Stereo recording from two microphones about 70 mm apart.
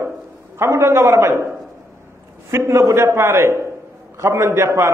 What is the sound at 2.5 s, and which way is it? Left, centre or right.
A man's voice, right.